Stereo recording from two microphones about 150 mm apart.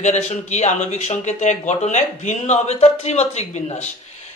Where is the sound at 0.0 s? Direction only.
50° left (ahead or behind).